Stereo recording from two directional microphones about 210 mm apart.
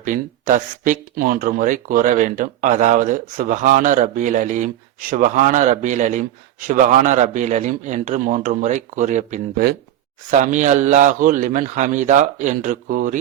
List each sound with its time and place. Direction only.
0.0 s speech: 40° right (ahead or behind)